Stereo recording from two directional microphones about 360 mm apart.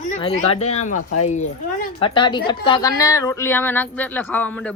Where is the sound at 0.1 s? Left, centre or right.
Centre.